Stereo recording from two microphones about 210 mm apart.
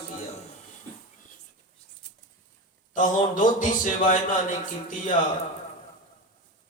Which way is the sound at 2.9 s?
40° left (ahead or behind).